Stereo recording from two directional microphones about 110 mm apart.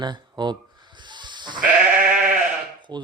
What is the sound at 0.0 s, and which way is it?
Bleat, 40° right (ahead or behind).